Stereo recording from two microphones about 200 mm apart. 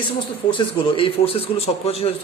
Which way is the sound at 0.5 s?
25° left (ahead or behind).